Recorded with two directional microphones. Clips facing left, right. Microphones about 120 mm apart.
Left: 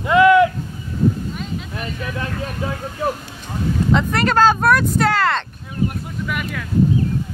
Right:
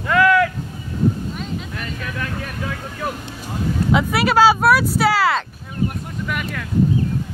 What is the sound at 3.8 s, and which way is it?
Speech, 5° right (ahead or behind).